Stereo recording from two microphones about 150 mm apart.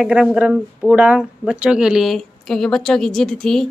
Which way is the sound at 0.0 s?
5° right (ahead or behind).